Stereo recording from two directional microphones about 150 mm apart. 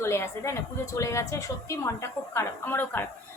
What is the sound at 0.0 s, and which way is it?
A woman's voice, 20° left (ahead or behind).